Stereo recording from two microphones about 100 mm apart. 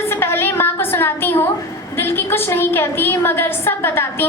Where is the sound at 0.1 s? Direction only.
20° left (ahead or behind).